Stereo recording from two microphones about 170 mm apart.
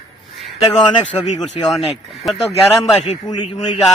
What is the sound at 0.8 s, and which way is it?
Speech, 30° left (ahead or behind).